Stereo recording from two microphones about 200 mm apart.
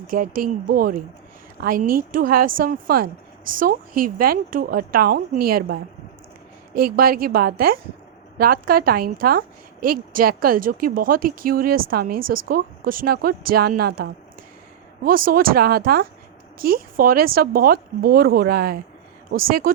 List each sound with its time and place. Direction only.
0.1 s speech: 45° right (ahead or behind)
6.7 s speech: 50° right (ahead or behind)